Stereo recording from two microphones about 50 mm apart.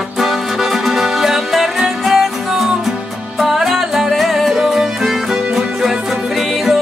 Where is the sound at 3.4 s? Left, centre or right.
Centre.